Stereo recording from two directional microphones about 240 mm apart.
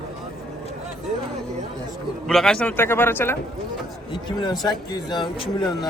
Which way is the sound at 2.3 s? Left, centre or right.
Centre.